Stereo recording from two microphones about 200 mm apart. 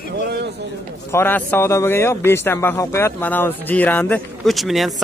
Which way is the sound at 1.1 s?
10° left (ahead or behind).